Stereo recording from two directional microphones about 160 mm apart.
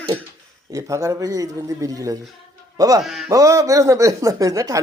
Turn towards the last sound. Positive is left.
turn(degrees=-20)  # may be behind; listen again after turning